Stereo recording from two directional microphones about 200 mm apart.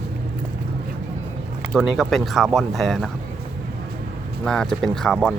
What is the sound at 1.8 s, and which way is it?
Speech, centre (ahead or behind).